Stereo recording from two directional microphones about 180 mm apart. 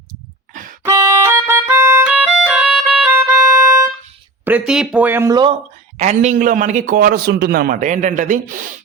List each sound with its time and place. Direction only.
0.1 s a sound: 45° right (ahead or behind)
0.9 s music: 15° right (ahead or behind)
4.4 s speech: 5° right (ahead or behind); by 5.5 s 25° right (ahead or behind)
6.0 s a man's voice: 40° right (ahead or behind)